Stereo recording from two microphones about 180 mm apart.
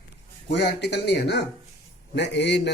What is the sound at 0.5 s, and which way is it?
Speech, 70° left (ahead or behind).